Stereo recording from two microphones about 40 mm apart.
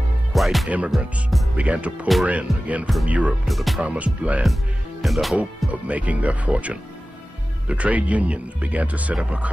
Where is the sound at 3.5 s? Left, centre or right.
Centre.